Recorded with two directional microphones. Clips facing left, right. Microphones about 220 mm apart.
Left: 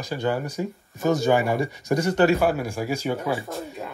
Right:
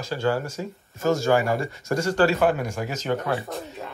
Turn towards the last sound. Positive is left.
turn(degrees=0)  # may be behind; listen again after turning